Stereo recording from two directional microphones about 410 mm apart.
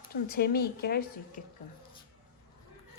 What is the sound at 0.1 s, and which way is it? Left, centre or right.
Speech, left.